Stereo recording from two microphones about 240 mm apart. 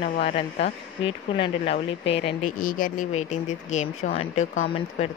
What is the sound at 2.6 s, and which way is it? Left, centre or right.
Speech, left.